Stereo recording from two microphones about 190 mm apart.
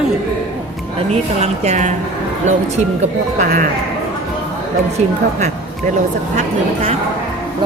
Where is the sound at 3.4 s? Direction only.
45° right (ahead or behind).